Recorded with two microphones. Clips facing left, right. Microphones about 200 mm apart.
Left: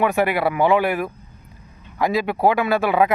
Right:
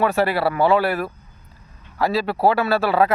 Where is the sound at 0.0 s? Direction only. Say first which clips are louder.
Even; 15° left (ahead or behind).